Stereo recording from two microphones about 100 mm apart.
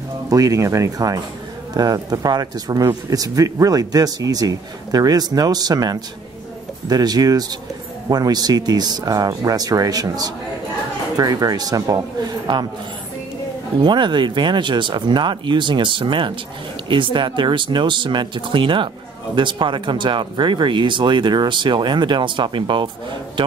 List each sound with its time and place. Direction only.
0.3 s speech: 35° right (ahead or behind)
13.7 s speech: 50° right (ahead or behind)